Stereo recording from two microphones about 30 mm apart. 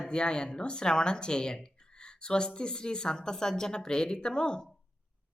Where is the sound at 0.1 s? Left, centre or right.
Left.